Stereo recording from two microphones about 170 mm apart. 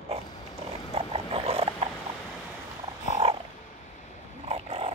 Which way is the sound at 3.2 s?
40° right (ahead or behind).